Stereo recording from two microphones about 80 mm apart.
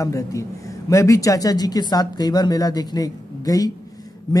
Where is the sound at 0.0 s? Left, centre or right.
Left.